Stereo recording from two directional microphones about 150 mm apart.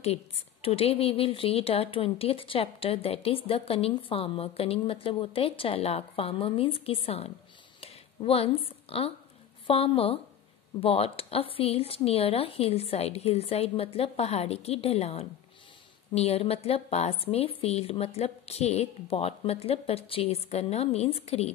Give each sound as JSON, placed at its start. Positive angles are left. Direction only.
{"t": 0.0, "sound": "a woman's voice", "side_deg": 40}